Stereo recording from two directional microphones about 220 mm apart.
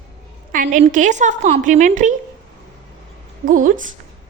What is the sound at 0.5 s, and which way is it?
A woman's voice, 35° right (ahead or behind).